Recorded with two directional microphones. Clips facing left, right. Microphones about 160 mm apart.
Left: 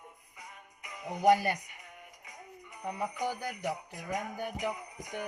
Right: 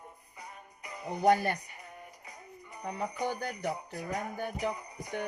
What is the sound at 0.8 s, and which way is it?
Music, 35° right (ahead or behind).